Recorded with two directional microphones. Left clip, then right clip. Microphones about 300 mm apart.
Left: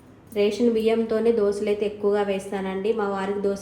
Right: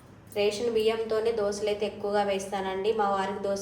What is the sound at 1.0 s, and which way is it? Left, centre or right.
A woman's voice, left.